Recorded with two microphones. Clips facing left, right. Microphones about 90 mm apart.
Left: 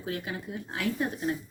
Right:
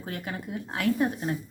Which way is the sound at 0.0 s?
50° right (ahead or behind).